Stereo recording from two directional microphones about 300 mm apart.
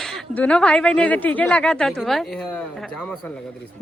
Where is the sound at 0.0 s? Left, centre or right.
Centre.